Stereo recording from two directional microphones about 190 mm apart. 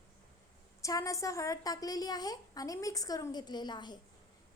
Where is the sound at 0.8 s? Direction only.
15° left (ahead or behind).